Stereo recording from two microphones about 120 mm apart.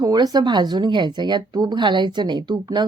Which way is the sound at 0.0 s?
35° right (ahead or behind).